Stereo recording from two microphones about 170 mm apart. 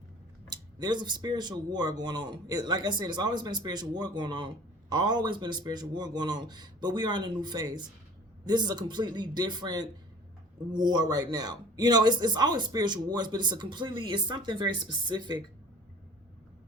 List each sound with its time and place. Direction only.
0.8 s a man's voice: 25° right (ahead or behind)